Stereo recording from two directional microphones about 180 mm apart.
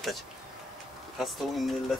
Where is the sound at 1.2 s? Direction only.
Centre (ahead or behind).